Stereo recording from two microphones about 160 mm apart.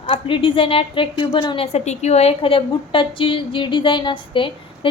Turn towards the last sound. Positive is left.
turn(degrees=30)  # may be behind; listen again after turning